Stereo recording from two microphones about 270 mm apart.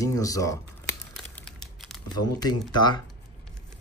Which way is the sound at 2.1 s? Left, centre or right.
Centre.